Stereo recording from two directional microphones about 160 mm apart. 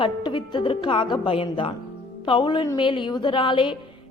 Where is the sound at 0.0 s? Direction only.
30° left (ahead or behind).